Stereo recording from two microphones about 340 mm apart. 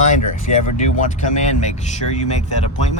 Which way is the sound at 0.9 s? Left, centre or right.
Left.